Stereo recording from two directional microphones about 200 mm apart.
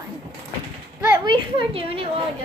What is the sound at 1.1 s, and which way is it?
Speech, 25° right (ahead or behind).